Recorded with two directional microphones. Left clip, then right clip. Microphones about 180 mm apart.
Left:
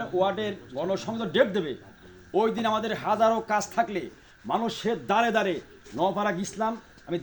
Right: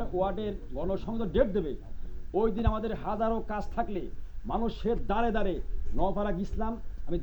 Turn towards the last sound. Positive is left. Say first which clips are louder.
# left 4 dB
turn(degrees=25)  # may be behind; listen again after turning